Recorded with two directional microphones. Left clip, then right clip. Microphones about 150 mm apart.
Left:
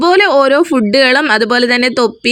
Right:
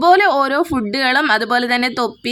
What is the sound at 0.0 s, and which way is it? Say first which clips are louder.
A woman's voice: left 3 dB; 15° left (ahead or behind).